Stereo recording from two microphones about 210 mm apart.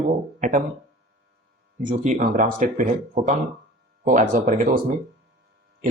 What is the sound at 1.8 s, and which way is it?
Speech, 40° right (ahead or behind).